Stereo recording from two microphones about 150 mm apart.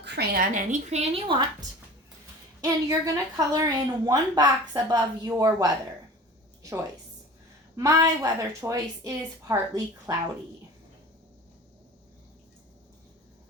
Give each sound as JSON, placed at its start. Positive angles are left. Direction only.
{"t": 0.2, "sound": "a woman's voice", "side_deg": -65}
{"t": 2.6, "sound": "a woman's voice", "side_deg": -25}
{"t": 7.8, "sound": "a woman's voice", "side_deg": -20}